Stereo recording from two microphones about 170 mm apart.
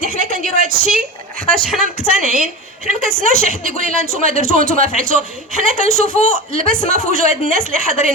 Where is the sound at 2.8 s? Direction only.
55° right (ahead or behind).